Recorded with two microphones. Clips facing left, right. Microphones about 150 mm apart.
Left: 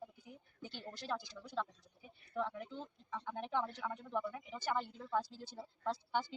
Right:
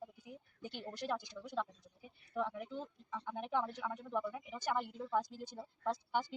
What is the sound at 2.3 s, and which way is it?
A woman's voice, 5° right (ahead or behind).